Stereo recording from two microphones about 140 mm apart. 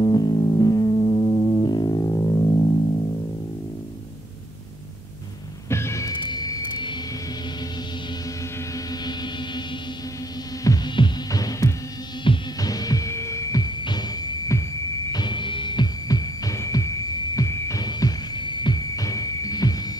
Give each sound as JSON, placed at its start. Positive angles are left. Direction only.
{"t": 0.0, "sound": "music", "side_deg": 30}
{"t": 5.7, "sound": "music", "side_deg": 20}
{"t": 8.7, "sound": "music", "side_deg": 30}
{"t": 10.6, "sound": "throbbing", "side_deg": 25}
{"t": 12.3, "sound": "music", "side_deg": 25}